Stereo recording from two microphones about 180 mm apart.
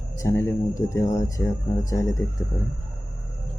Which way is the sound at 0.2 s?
15° left (ahead or behind).